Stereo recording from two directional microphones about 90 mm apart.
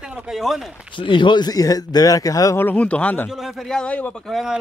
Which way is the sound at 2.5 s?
20° left (ahead or behind).